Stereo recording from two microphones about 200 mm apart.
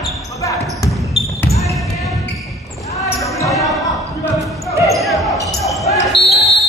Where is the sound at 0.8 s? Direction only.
Centre (ahead or behind).